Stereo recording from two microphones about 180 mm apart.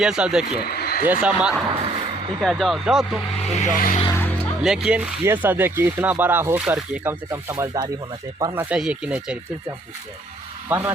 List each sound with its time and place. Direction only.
0.0 s speech: 5° right (ahead or behind)
0.7 s a sound: 60° left (ahead or behind)
1.0 s speech: 5° right (ahead or behind)
3.4 s speech: 40° left (ahead or behind)
4.0 s speech: 15° left (ahead or behind)
4.6 s speech: 5° right (ahead or behind)
7.5 s speech: 25° right (ahead or behind)
8.5 s speech: 5° right (ahead or behind)
10.7 s speech: 15° right (ahead or behind)